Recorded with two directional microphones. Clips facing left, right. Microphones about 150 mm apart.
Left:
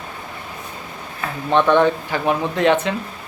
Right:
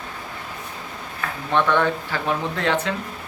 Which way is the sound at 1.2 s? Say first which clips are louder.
Left 4 dB; 15° left (ahead or behind).